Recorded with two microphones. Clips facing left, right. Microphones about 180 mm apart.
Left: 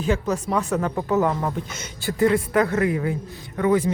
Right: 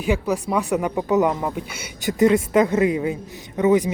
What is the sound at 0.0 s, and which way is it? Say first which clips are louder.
Speech: right 1 dB; 10° right (ahead or behind).